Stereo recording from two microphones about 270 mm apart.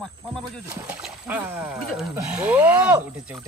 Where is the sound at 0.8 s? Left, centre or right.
Centre.